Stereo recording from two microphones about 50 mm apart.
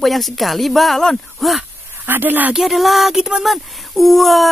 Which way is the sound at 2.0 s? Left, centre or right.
Right.